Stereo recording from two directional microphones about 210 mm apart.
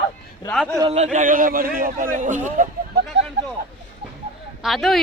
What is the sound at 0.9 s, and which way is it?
A man's voice, 35° right (ahead or behind).